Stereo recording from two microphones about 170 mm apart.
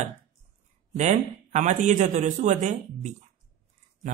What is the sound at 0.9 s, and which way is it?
Speech, 45° right (ahead or behind).